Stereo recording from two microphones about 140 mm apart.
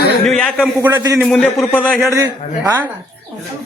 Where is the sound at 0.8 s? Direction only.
20° right (ahead or behind).